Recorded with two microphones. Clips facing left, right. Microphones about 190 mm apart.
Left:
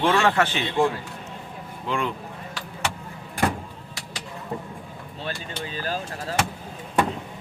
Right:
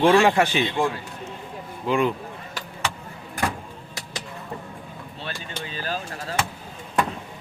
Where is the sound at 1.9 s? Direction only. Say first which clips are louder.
Right 5 dB; 5° right (ahead or behind).